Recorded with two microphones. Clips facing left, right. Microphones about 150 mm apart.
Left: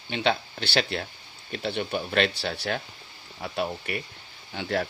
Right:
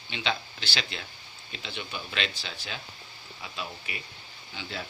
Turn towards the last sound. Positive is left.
turn(degrees=60)  # may be behind; listen again after turning